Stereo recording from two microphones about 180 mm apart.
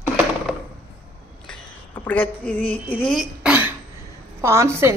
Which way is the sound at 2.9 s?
Centre (ahead or behind).